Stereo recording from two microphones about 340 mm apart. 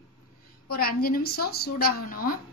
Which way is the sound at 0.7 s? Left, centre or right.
Left.